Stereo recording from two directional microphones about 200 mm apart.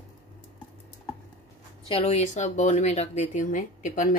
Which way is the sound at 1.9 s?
35° left (ahead or behind).